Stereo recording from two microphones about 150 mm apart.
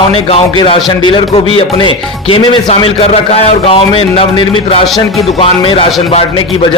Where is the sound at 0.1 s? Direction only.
40° left (ahead or behind).